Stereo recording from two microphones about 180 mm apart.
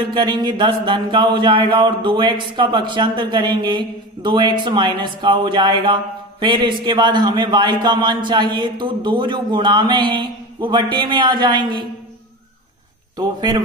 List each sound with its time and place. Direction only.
0.1 s speech: 25° right (ahead or behind)